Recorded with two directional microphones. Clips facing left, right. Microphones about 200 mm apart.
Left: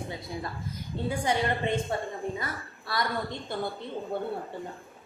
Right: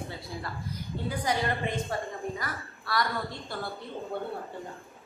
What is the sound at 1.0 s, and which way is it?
A woman's voice, 25° left (ahead or behind).